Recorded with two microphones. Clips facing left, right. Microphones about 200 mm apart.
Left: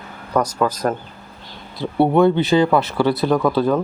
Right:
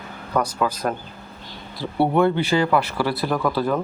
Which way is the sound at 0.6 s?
10° right (ahead or behind).